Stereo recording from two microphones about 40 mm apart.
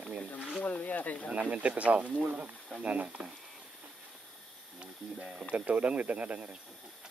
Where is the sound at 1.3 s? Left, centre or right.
Right.